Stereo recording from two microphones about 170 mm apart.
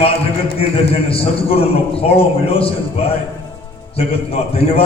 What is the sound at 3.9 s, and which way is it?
Speech, 35° left (ahead or behind).